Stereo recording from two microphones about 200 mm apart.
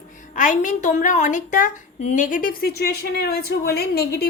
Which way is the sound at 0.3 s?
40° left (ahead or behind).